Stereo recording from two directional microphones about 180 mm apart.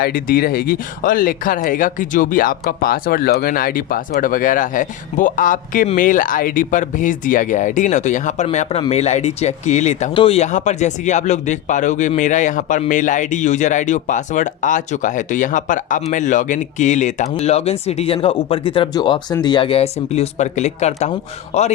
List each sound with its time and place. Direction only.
0.0 s speech: 55° left (ahead or behind); by 21.7 s 35° left (ahead or behind)